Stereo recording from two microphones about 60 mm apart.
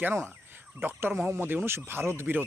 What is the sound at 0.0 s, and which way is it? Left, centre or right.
Speech, right.